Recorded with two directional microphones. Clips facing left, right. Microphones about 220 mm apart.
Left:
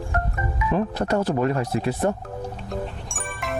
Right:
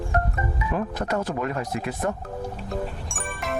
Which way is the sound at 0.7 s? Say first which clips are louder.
Left 4 dB; 30° left (ahead or behind).